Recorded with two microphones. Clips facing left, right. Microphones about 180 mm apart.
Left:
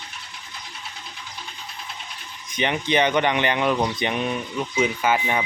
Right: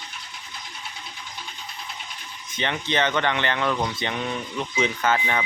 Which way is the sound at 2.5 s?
15° left (ahead or behind).